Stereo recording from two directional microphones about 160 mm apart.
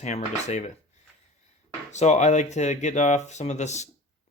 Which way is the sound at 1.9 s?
45° left (ahead or behind).